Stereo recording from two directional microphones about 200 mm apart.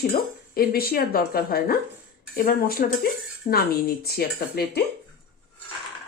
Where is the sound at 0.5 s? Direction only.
50° left (ahead or behind).